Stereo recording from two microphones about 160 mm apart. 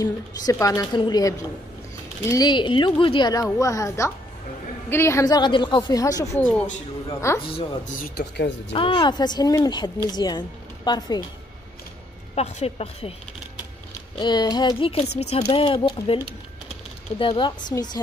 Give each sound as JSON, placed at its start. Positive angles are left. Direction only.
{"t": 0.0, "sound": "a woman's voice", "side_deg": 20}
{"t": 7.4, "sound": "a woman's voice", "side_deg": 35}
{"t": 7.8, "sound": "speech", "side_deg": 75}
{"t": 8.7, "sound": "a woman's voice", "side_deg": 30}
{"t": 12.4, "sound": "a woman's voice", "side_deg": 40}
{"t": 14.1, "sound": "a woman's voice", "side_deg": 30}
{"t": 17.2, "sound": "a woman's voice", "side_deg": 30}